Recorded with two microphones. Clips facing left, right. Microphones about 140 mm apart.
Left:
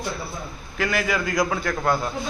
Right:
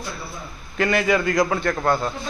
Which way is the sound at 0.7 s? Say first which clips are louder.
Right 4 dB; centre (ahead or behind).